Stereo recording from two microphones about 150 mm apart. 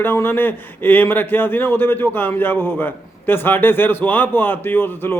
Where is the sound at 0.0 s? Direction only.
15° left (ahead or behind).